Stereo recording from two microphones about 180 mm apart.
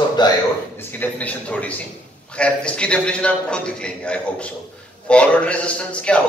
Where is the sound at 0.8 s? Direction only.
10° left (ahead or behind).